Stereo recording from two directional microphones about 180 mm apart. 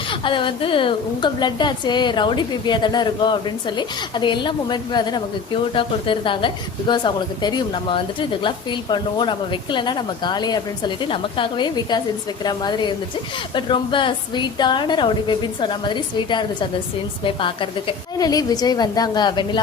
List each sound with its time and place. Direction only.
0.1 s a woman's voice: 30° left (ahead or behind)